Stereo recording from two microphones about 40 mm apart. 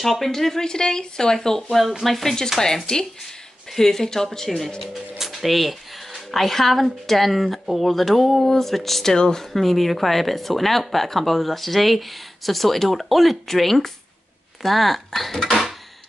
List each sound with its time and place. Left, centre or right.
0.0 s speech: centre
1.7 s speech: centre
2.6 s speech: centre
5.1 s speech: centre
9.1 s speech: centre
9.5 s speech: centre
15.4 s a sound: centre